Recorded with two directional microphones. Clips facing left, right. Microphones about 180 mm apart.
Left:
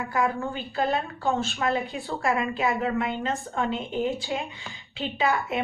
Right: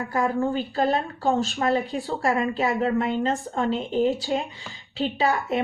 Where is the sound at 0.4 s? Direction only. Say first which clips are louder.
Right 5 dB; 35° right (ahead or behind).